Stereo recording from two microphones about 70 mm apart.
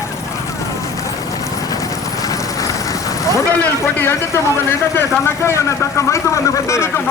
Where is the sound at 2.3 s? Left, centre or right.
Left.